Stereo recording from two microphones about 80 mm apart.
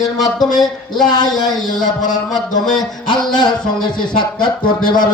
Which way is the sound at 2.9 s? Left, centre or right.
Left.